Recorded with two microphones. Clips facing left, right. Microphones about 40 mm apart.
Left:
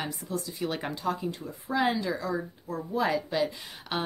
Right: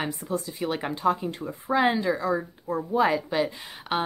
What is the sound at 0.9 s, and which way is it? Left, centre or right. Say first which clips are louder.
A woman's voice: right 6 dB; right.